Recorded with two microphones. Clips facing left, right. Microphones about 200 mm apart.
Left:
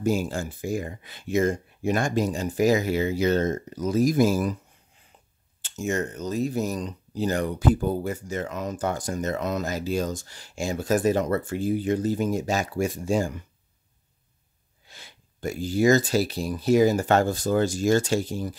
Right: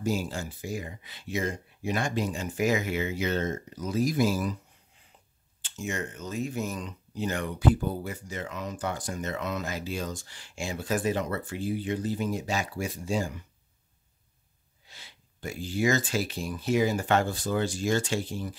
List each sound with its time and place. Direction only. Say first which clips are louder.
0.0 s speech: left 5 dB; 50° left (ahead or behind)
5.6 s speech: left 7 dB; 45° left (ahead or behind)
14.9 s speech: left 4 dB; 50° left (ahead or behind)